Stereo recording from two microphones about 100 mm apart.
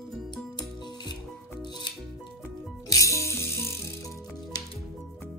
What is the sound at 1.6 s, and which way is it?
Music, 50° left (ahead or behind).